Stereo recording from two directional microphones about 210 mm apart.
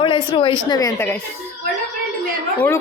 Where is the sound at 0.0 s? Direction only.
25° left (ahead or behind).